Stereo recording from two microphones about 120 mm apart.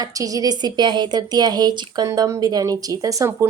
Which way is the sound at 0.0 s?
30° right (ahead or behind).